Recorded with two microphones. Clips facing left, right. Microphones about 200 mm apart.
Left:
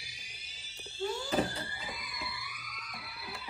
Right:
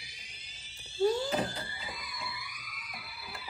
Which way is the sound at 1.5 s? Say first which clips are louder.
Even; centre (ahead or behind).